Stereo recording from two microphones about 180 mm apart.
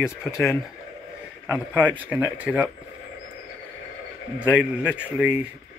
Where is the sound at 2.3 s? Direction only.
5° right (ahead or behind).